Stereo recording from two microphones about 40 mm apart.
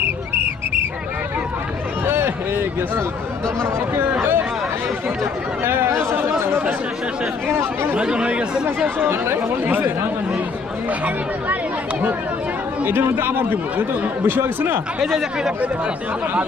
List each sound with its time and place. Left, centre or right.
2.0 s a sound: right
4.2 s chatter: right
5.6 s chatter: right
7.4 s speech: right
8.0 s speech: right
9.0 s speech: right
9.6 s speech: right
12.8 s speech: right
15.0 s speech: centre